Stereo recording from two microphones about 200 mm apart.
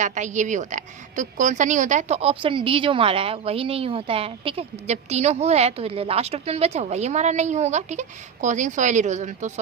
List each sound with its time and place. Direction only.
0.0 s speech: 35° right (ahead or behind)